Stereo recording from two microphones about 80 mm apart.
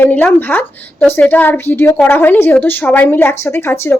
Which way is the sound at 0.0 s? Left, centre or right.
Left.